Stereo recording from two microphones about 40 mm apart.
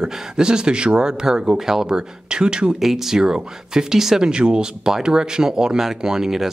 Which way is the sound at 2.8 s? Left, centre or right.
Centre.